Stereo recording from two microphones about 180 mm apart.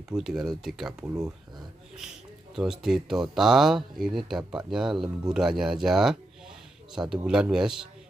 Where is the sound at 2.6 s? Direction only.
5° right (ahead or behind).